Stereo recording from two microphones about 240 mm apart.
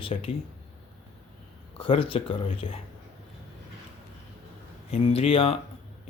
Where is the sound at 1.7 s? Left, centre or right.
Left.